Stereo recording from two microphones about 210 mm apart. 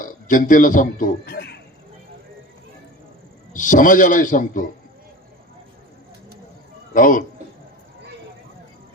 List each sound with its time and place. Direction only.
0.0 s a man's voice: 40° left (ahead or behind)
3.5 s a man's voice: 40° left (ahead or behind)
6.9 s a man's voice: 40° left (ahead or behind)